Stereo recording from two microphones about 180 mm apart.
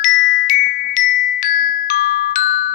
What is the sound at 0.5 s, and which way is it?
Glockenspiel, 45° left (ahead or behind).